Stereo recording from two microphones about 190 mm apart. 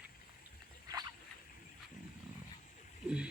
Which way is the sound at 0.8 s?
20° right (ahead or behind).